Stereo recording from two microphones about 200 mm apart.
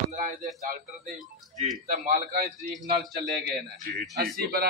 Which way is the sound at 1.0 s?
Centre (ahead or behind).